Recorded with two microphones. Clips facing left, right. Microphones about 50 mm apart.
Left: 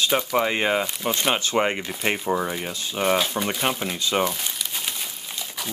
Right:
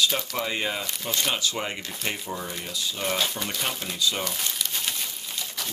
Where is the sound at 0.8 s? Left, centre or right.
Left.